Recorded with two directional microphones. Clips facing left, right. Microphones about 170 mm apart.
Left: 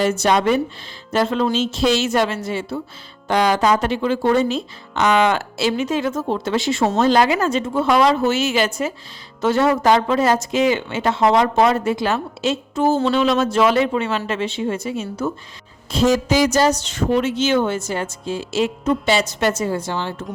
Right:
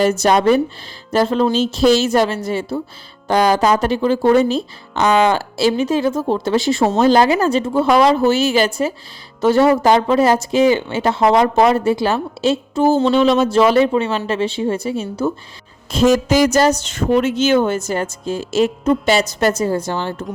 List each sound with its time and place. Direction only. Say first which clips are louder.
0.0 s speech: right 3 dB; 40° right (ahead or behind)
15.9 s a woman's voice: right 3 dB; 50° right (ahead or behind)